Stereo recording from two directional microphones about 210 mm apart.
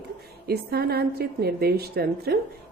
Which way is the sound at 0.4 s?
50° right (ahead or behind).